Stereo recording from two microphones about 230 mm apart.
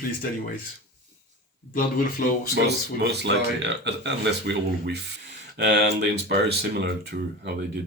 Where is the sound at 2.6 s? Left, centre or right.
Right.